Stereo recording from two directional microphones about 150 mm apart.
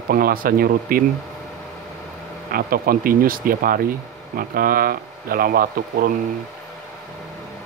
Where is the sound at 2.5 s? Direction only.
75° right (ahead or behind).